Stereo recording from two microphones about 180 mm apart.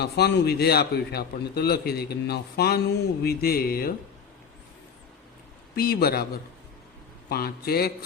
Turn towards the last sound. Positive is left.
turn(degrees=60)  # may be behind; listen again after turning